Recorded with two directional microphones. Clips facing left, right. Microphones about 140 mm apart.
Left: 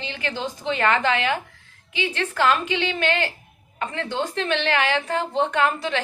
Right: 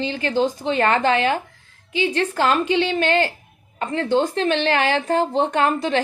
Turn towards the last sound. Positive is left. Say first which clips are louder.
# right 3 dB
turn(degrees=-35)  # may be behind; listen again after turning